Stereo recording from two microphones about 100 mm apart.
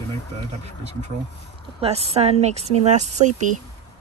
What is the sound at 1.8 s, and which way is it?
A woman's voice, 85° right.